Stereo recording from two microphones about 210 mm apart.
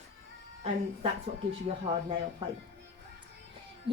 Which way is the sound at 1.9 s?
25° right (ahead or behind).